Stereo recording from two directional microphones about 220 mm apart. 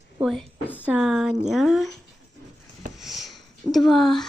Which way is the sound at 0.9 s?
Centre (ahead or behind).